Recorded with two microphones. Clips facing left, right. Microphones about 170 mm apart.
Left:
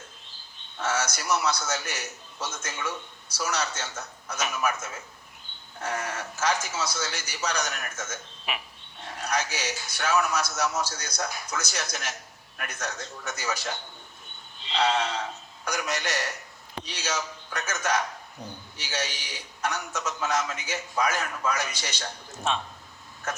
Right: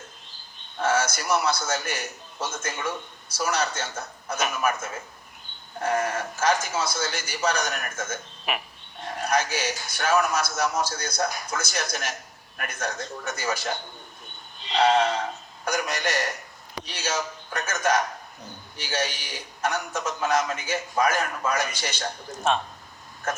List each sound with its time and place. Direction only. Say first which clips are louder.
0.8 s a man's voice: right 5 dB; 55° right (ahead or behind)